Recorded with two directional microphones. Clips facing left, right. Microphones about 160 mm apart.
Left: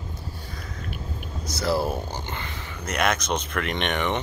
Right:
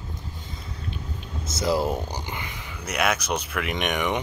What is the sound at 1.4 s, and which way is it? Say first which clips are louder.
Speech: right 1 dB; 20° right (ahead or behind).